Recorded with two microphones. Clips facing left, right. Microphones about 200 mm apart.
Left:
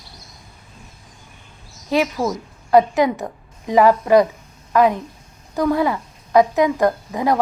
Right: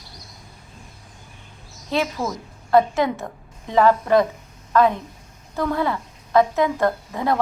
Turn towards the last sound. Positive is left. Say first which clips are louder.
# left 3 dB
turn(degrees=10)  # may be behind; listen again after turning